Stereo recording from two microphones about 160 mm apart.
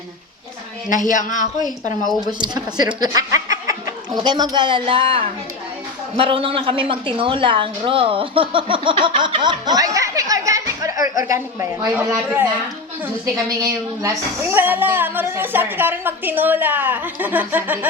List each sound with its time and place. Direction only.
0.9 s a woman's voice: 55° left (ahead or behind)
2.0 s a woman's voice: 25° right (ahead or behind); by 12.5 s 10° right (ahead or behind)
13.3 s a woman's voice: 20° right (ahead or behind)